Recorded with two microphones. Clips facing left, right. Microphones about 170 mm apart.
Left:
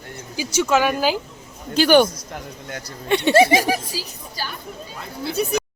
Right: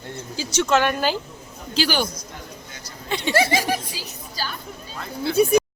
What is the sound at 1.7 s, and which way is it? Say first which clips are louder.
Speech: left 9 dB; 55° left (ahead or behind).